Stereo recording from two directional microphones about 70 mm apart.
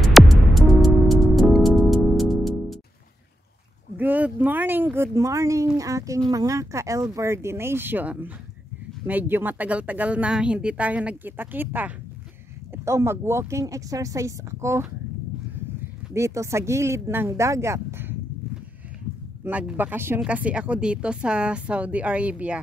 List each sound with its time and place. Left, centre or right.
0.0 s music: centre
3.9 s a woman's voice: right
12.7 s a woman's voice: right
16.1 s a woman's voice: right
19.4 s speech: right
20.2 s a woman's voice: centre